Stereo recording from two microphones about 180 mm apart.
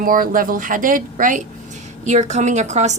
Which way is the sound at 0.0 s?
50° right (ahead or behind).